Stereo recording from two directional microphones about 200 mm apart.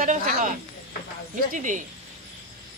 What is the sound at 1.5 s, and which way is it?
Speech, 40° right (ahead or behind).